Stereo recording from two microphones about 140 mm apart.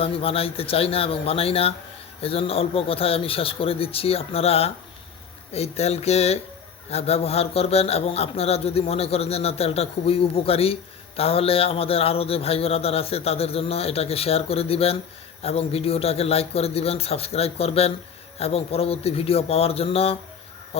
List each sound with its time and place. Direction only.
0.0 s speech: 40° left (ahead or behind)